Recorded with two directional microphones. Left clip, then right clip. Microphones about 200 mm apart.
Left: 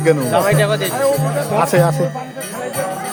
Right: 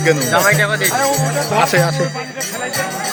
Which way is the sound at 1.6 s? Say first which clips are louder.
Even; 25° left (ahead or behind).